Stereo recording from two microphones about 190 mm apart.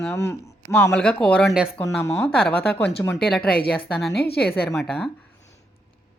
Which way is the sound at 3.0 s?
5° left (ahead or behind).